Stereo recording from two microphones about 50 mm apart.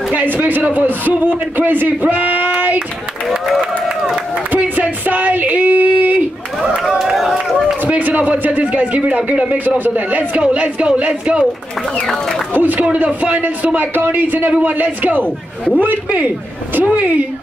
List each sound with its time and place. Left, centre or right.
0.1 s a man's voice: right
3.8 s run: centre
4.6 s a sound: right
7.0 s run: centre
7.9 s a man's voice: right; by 11.3 s centre
12.5 s a man's voice: right